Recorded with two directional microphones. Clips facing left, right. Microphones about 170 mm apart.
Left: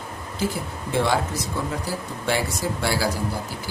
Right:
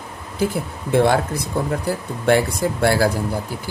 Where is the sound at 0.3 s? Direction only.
55° right (ahead or behind).